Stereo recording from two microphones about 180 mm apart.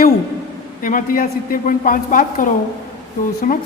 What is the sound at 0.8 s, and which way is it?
A woman's voice, 50° left (ahead or behind).